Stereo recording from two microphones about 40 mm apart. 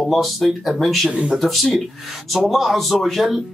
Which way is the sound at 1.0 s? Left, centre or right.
Right.